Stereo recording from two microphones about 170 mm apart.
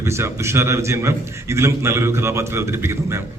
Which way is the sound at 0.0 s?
15° right (ahead or behind).